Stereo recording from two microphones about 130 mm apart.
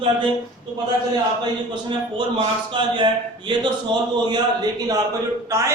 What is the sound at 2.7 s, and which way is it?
Speech, 40° right (ahead or behind).